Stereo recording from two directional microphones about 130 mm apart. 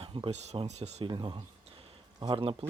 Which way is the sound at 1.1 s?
35° right (ahead or behind).